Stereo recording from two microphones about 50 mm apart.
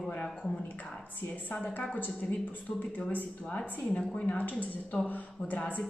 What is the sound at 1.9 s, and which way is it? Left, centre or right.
Speech, left.